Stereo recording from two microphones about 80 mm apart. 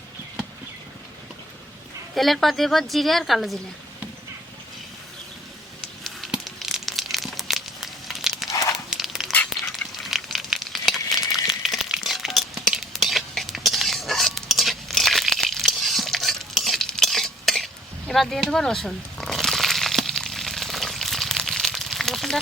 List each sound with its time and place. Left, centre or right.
2.1 s a woman's voice: centre
6.0 s crumpling: centre
8.9 s a sound: centre